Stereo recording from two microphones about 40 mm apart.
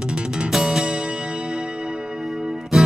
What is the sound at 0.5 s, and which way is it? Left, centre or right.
Music, centre.